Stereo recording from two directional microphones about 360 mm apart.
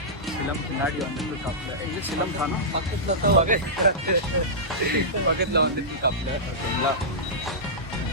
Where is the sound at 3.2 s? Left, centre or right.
Right.